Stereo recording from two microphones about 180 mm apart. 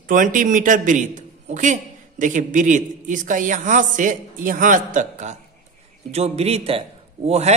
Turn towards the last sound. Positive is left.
turn(degrees=-35)  # may be behind; listen again after turning